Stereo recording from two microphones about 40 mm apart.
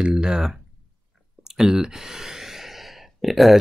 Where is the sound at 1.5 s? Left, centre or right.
Centre.